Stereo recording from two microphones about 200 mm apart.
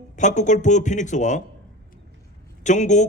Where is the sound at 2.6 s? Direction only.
40° left (ahead or behind).